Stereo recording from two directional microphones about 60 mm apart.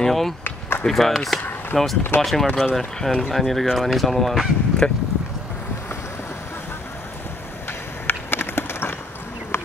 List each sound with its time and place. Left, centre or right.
0.0 s speech: centre
0.4 s a sound: left
0.8 s speech: centre
2.1 s speech: left
2.5 s speech: centre
8.1 s run: left